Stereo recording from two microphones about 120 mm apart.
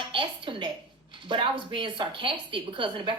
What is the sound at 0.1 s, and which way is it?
A woman's voice, 45° right (ahead or behind).